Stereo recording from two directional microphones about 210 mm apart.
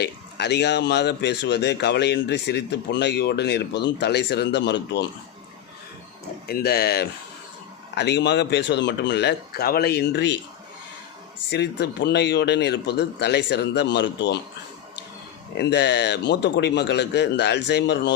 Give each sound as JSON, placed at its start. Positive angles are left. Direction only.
{"t": 0.0, "sound": "speech", "side_deg": 55}
{"t": 6.5, "sound": "speech", "side_deg": 45}
{"t": 11.5, "sound": "speech", "side_deg": 55}
{"t": 15.5, "sound": "speech", "side_deg": 55}